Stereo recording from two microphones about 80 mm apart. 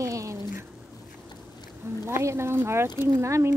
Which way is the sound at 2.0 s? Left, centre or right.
Right.